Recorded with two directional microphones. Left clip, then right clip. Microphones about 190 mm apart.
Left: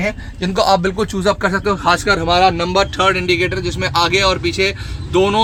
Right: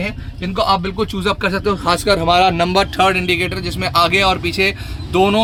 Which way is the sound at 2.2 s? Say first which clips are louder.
Right 1 dB; 25° right (ahead or behind).